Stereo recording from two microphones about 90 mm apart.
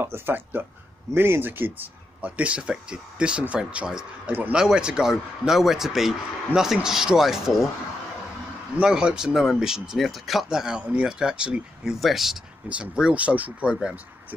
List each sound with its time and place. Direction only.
0.0 s a man's voice: 25° right (ahead or behind); by 7.6 s 5° right (ahead or behind)
8.7 s speech: 10° right (ahead or behind)